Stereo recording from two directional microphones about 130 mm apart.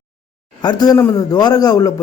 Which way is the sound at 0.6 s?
30° left (ahead or behind).